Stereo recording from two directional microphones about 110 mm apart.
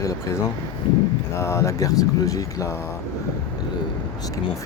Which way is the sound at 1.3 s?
25° left (ahead or behind).